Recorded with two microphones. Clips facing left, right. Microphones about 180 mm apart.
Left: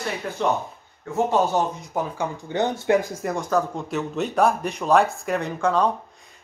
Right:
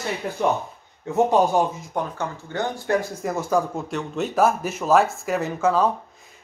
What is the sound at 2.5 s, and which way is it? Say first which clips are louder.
Speech: left 3 dB; 15° left (ahead or behind).